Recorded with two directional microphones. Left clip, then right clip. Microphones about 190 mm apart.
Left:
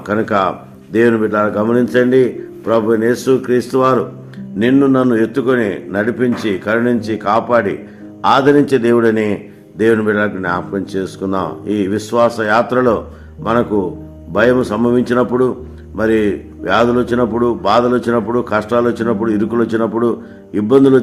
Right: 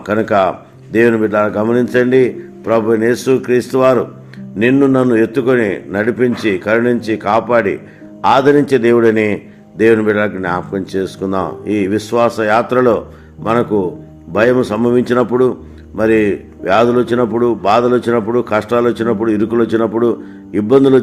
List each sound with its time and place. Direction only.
0.0 s a man's voice: 25° right (ahead or behind)